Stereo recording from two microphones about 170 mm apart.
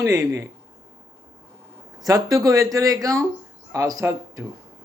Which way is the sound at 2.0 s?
20° right (ahead or behind).